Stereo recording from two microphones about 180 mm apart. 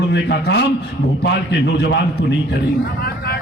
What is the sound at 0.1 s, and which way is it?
A man's voice, 70° left (ahead or behind).